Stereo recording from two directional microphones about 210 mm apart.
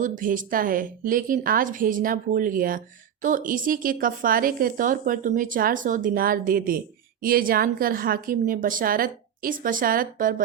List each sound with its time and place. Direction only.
0.0 s a woman's voice: 40° right (ahead or behind)